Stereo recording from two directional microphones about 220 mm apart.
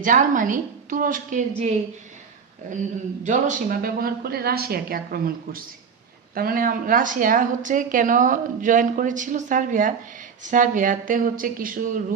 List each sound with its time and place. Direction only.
0.0 s a woman's voice: 35° right (ahead or behind)
3.2 s a woman's voice: 35° right (ahead or behind)